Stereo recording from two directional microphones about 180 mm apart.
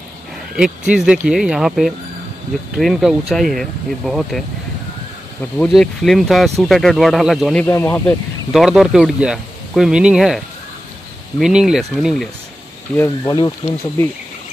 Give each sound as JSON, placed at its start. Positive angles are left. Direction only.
{"t": 0.6, "sound": "speech", "side_deg": -5}
{"t": 5.6, "sound": "speech", "side_deg": 0}
{"t": 7.6, "sound": "speech", "side_deg": 10}
{"t": 8.5, "sound": "speech", "side_deg": -5}
{"t": 12.9, "sound": "speech", "side_deg": 15}